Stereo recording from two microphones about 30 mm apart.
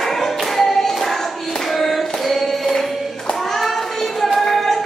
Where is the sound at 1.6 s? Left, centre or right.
Centre.